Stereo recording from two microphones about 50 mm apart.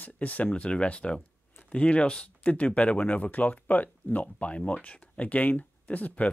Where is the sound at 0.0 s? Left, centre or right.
Left.